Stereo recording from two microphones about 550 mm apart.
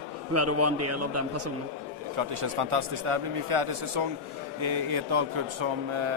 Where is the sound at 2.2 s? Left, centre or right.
Right.